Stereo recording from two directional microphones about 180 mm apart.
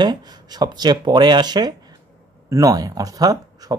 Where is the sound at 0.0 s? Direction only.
25° right (ahead or behind).